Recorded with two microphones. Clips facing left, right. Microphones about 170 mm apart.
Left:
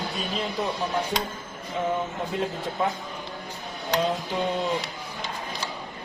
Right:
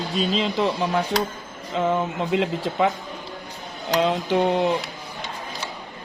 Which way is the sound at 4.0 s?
80° right.